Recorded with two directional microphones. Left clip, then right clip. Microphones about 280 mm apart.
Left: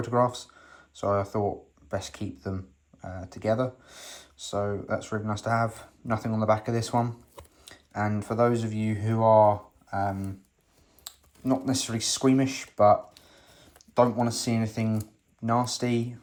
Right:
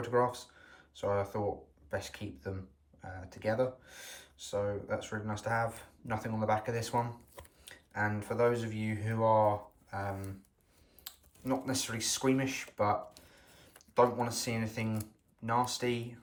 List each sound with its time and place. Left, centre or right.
0.0 s speech: centre
11.6 s speech: centre